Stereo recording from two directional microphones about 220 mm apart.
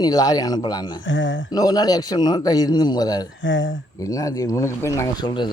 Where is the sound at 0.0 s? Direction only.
15° left (ahead or behind).